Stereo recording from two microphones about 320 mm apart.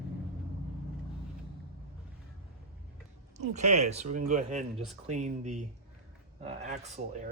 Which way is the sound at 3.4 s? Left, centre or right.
Right.